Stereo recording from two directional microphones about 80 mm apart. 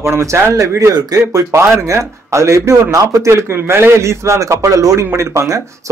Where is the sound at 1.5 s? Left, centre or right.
Right.